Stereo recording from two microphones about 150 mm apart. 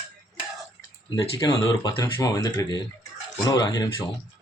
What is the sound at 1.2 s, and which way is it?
Speech, 20° left (ahead or behind).